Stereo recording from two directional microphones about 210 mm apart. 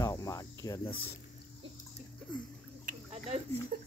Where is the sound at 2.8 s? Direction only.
30° right (ahead or behind).